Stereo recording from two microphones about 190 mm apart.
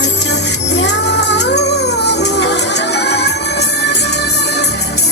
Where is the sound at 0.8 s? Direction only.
65° left (ahead or behind).